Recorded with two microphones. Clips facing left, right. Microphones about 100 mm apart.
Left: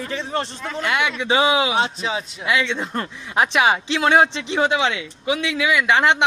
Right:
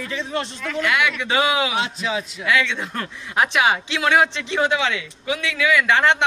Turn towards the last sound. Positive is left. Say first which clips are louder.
# even
turn(degrees=20)  # may be behind; listen again after turning